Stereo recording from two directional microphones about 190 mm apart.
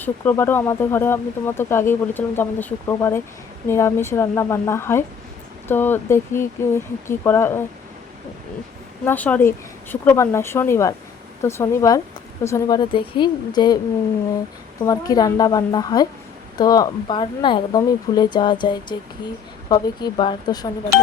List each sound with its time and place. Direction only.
0.0 s speech: 10° left (ahead or behind)
9.0 s speech: 10° left (ahead or behind)
14.8 s speech: 20° left (ahead or behind)